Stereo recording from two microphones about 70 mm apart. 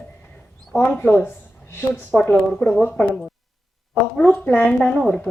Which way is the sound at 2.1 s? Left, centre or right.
Centre.